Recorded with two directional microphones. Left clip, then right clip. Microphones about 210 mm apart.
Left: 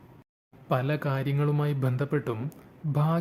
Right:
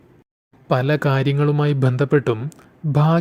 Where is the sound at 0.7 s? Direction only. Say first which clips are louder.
Right 10 dB; 30° right (ahead or behind).